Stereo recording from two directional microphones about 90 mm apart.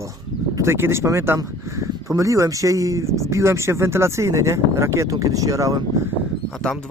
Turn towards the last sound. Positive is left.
turn(degrees=5)  # may be behind; listen again after turning